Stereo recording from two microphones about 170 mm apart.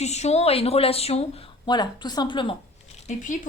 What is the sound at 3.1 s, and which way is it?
Speech, 50° left (ahead or behind).